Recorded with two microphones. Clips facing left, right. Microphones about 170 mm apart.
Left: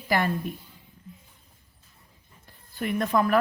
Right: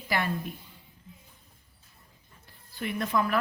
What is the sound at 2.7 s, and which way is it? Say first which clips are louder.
Speech: left 4 dB; 50° left (ahead or behind).